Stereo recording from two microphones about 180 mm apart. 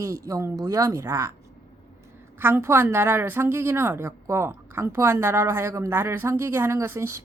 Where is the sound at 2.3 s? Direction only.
15° right (ahead or behind).